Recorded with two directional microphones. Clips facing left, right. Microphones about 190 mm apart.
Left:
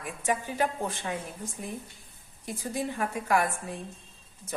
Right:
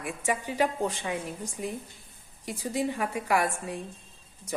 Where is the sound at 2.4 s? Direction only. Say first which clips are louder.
Right 3 dB; 15° right (ahead or behind).